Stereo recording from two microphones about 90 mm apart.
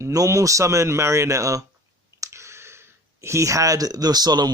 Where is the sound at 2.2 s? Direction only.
30° right (ahead or behind); by 4.5 s 50° right (ahead or behind).